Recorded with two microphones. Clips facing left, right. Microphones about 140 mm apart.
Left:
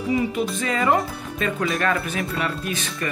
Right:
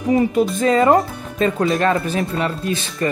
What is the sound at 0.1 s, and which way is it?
Speech, 40° right (ahead or behind).